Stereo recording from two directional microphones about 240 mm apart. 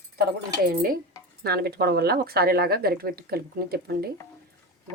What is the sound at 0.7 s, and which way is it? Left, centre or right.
Speech, right.